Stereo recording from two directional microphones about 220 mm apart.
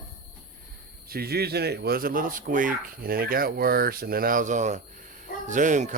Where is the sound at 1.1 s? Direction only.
45° right (ahead or behind).